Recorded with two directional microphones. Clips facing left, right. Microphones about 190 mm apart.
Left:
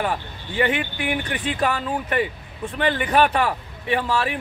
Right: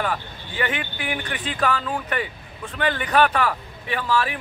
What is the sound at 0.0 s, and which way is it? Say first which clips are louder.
Speech: left 1 dB; 25° left (ahead or behind).